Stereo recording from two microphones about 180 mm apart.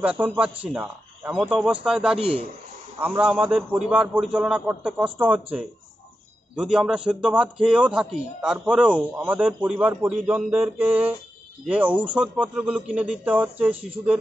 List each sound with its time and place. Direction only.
0.0 s a man's voice: 10° right (ahead or behind)